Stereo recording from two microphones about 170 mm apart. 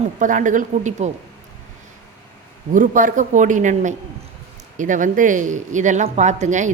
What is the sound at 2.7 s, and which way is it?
A woman's voice, 50° right (ahead or behind).